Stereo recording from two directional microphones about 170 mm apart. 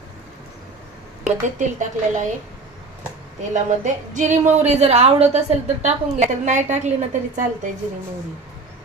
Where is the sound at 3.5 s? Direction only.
45° right (ahead or behind).